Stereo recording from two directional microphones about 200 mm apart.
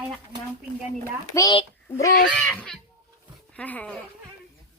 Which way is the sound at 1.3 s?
20° left (ahead or behind).